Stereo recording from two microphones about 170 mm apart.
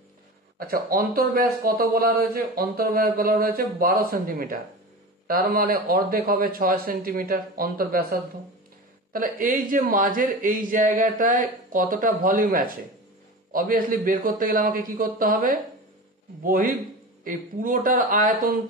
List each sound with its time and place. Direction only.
0.6 s a man's voice: 60° right (ahead or behind)